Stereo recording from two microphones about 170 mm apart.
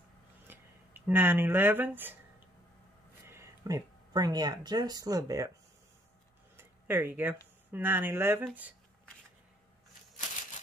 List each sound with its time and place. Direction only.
0.5 s speech: 10° right (ahead or behind)
3.3 s speech: 15° right (ahead or behind)
6.5 s a sound: 10° right (ahead or behind)
7.7 s speech: 10° right (ahead or behind)